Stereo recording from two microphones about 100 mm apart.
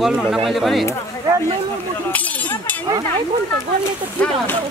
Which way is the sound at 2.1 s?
15° left (ahead or behind).